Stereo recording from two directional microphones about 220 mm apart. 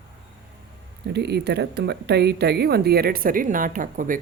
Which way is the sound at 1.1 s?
50° right (ahead or behind).